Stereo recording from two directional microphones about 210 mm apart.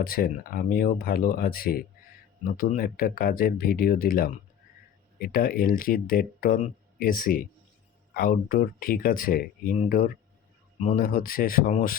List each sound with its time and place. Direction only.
0.0 s speech: 45° left (ahead or behind)